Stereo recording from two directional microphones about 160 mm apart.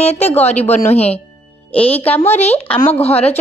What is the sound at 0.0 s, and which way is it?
A woman's voice, 45° left (ahead or behind).